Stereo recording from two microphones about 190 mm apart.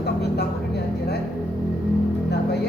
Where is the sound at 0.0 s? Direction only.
60° left (ahead or behind).